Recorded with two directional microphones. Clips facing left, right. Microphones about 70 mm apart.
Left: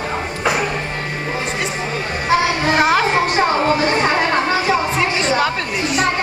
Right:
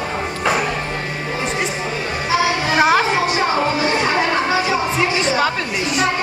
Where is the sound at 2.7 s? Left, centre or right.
Centre.